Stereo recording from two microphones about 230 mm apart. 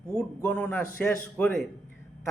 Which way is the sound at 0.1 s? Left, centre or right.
Centre.